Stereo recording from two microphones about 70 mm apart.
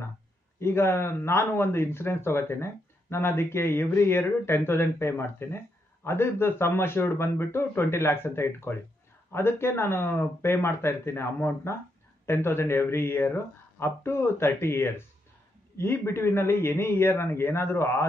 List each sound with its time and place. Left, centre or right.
0.6 s speech: left